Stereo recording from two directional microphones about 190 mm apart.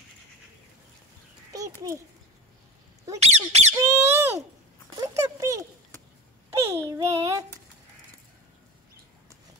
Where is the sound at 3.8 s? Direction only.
15° right (ahead or behind).